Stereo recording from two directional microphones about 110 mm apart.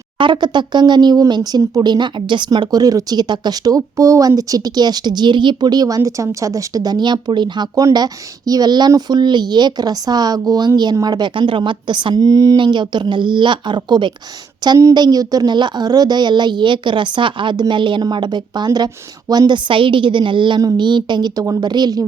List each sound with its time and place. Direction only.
0.2 s a woman's voice: 45° right (ahead or behind)
12.5 s a woman's voice: 45° right (ahead or behind)